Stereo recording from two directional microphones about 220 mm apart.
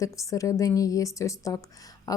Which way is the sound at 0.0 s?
15° left (ahead or behind).